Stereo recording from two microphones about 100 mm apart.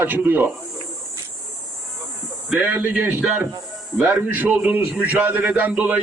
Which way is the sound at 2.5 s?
15° right (ahead or behind).